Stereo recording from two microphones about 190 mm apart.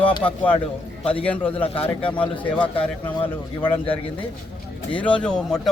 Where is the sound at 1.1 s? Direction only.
5° left (ahead or behind).